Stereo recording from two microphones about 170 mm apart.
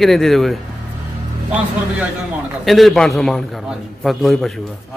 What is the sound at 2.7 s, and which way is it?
A man's voice, centre (ahead or behind).